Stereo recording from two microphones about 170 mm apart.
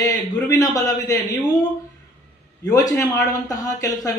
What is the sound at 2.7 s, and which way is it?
A man's voice, 20° left (ahead or behind).